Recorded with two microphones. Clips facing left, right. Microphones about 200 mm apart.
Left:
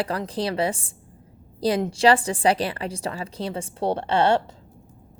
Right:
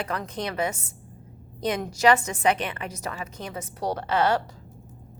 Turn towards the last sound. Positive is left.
turn(degrees=30)  # may be behind; listen again after turning